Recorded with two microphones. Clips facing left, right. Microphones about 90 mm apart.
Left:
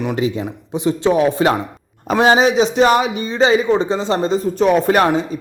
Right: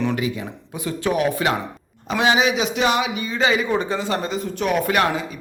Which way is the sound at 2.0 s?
40° left (ahead or behind).